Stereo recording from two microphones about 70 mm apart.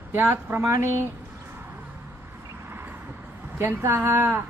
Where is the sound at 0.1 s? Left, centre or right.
Right.